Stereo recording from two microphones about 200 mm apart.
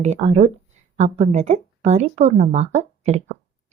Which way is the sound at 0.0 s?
35° right (ahead or behind).